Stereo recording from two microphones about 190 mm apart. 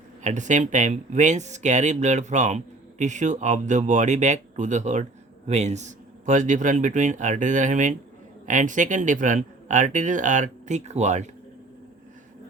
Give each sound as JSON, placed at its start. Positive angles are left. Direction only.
{"t": 0.2, "sound": "speech", "side_deg": -40}